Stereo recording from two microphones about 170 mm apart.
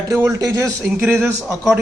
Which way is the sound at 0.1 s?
15° right (ahead or behind).